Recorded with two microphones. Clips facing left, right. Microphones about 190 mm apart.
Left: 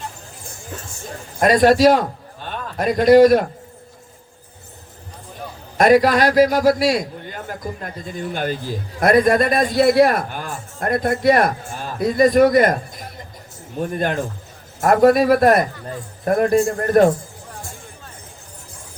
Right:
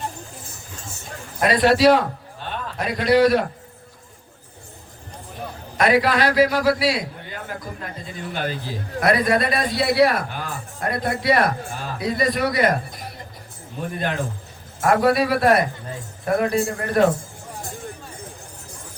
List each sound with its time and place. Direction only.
1.4 s a man's voice: 45° left (ahead or behind)
5.7 s a man's voice: 45° left (ahead or behind)
14.8 s a man's voice: 45° left (ahead or behind)